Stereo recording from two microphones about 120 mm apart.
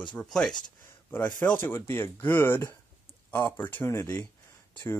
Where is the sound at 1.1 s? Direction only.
15° left (ahead or behind).